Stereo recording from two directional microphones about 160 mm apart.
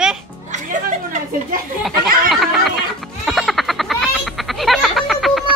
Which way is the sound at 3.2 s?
Centre (ahead or behind).